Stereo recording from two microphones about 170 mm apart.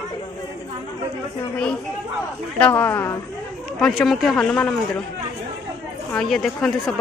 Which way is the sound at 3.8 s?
Centre (ahead or behind).